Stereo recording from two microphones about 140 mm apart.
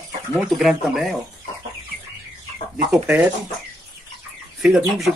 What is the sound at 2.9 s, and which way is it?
Speech, 10° right (ahead or behind).